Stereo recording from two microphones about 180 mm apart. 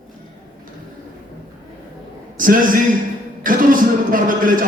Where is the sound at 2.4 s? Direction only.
50° right (ahead or behind).